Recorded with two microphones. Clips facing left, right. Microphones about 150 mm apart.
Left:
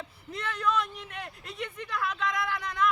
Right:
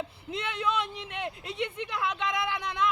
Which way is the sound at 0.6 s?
25° right (ahead or behind).